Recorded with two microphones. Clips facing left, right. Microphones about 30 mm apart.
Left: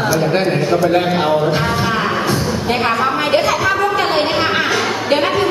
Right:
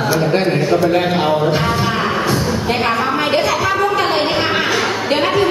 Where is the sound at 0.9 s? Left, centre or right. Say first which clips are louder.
Left 1 dB; centre.